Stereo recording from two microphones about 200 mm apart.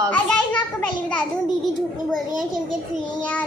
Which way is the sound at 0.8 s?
5° left (ahead or behind).